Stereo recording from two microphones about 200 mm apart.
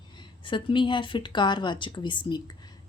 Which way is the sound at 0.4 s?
25° left (ahead or behind).